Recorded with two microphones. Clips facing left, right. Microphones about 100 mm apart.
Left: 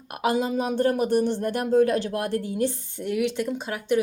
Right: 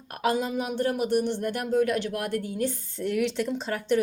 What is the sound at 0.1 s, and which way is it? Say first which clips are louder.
Speech: left 2 dB; 20° left (ahead or behind).